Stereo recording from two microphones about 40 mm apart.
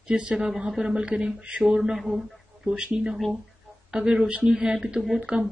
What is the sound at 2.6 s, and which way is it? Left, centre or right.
Speech, right.